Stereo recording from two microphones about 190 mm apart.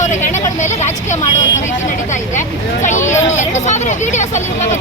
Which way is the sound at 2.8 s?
40° left (ahead or behind).